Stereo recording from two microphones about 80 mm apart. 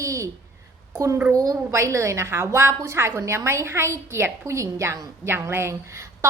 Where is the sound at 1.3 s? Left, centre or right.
Right.